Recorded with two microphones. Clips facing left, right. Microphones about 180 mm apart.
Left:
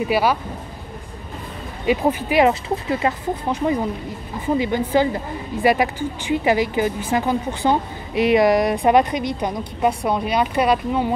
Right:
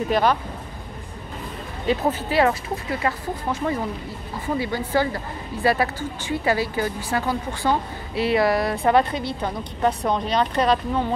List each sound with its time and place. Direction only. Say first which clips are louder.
0.1 s a woman's voice: even; 10° left (ahead or behind)
1.9 s a woman's voice: left 3 dB; 15° left (ahead or behind)